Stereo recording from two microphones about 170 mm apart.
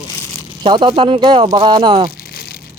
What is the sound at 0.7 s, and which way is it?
Speech, 30° right (ahead or behind).